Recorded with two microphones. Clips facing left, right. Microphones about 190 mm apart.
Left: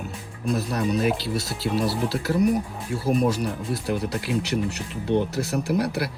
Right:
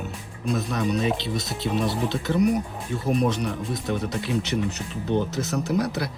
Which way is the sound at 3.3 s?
Centre (ahead or behind).